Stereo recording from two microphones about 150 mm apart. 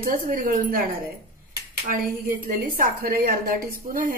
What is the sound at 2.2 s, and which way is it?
A woman's voice, 70° right (ahead or behind).